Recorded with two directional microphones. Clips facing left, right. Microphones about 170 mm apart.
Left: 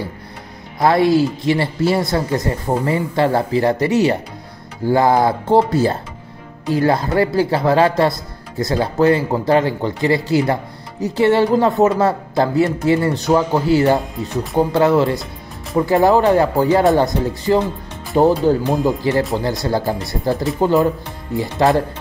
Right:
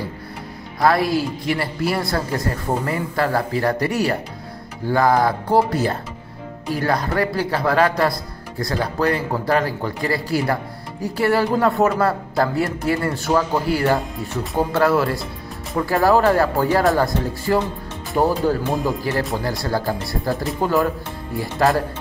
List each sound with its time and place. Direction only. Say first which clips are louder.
0.7 s speech: left 4 dB; 25° left (ahead or behind)
18.7 s speech: left 4 dB; centre (ahead or behind)
19.3 s speech: left 4 dB; 20° left (ahead or behind)